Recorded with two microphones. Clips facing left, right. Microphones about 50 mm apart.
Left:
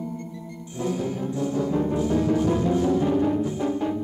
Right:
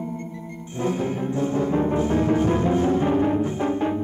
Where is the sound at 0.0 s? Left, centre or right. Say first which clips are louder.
Right 2 dB; right.